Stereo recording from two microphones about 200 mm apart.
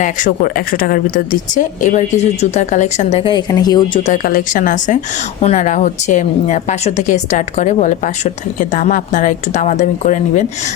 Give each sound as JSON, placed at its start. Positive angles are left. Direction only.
{"t": 0.0, "sound": "a woman's voice", "side_deg": 40}
{"t": 4.0, "sound": "a woman's voice", "side_deg": 40}